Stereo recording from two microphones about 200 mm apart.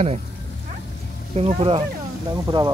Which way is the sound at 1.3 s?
30° right (ahead or behind).